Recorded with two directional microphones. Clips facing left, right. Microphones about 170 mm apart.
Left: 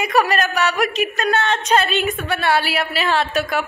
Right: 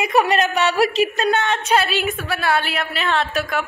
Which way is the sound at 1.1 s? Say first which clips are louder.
Even; 20° right (ahead or behind).